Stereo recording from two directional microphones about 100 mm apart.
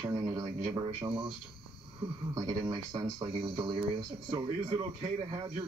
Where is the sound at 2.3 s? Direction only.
40° right (ahead or behind).